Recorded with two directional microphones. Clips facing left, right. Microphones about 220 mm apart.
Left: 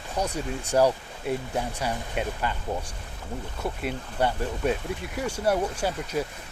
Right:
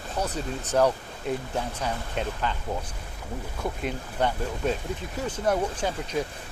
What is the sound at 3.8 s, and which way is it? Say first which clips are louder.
Speech: left 1 dB; 5° left (ahead or behind).